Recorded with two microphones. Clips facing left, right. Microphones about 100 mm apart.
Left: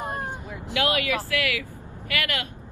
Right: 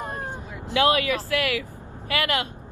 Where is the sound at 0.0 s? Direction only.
15° left (ahead or behind).